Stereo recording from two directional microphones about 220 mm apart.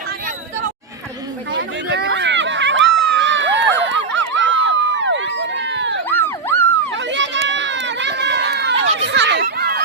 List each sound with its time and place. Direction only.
1.5 s hubbub: 50° right (ahead or behind)
6.1 s a sound: 10° left (ahead or behind)
6.9 s run: 55° right (ahead or behind)
9.0 s children playing: 50° right (ahead or behind)